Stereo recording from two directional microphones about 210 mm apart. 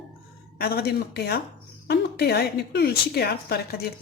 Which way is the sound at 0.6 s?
50° left (ahead or behind).